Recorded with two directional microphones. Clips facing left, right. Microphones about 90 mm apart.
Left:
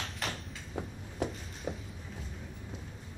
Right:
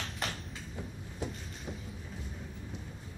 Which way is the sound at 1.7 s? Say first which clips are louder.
Left 5 dB; 60° left (ahead or behind).